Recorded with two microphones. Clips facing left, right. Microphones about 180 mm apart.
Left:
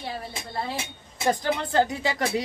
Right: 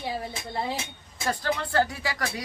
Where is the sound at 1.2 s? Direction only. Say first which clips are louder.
Left 4 dB; 20° left (ahead or behind).